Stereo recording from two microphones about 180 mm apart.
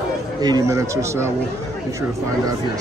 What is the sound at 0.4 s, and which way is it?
Speech, 20° right (ahead or behind).